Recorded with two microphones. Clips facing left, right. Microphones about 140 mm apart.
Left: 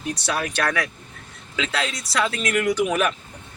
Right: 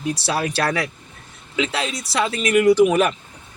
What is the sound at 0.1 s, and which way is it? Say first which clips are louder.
Speech: right 3 dB; 30° right (ahead or behind).